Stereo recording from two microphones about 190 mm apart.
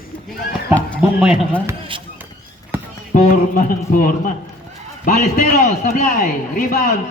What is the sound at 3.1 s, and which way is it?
A man's voice, 45° left (ahead or behind).